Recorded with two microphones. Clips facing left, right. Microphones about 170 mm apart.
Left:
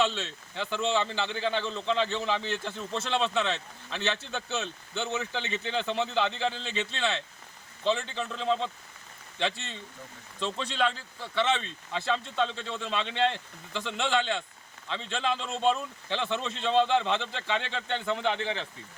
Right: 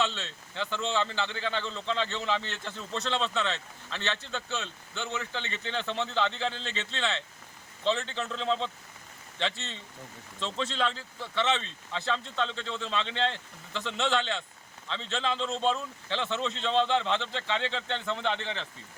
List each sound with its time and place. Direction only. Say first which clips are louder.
0.0 s speech: left 3 dB; 15° left (ahead or behind)
10.4 s speech: left 1 dB; 5° left (ahead or behind)